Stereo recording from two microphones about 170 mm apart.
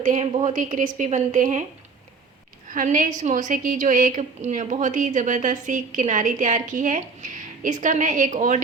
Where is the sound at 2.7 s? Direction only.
50° right (ahead or behind).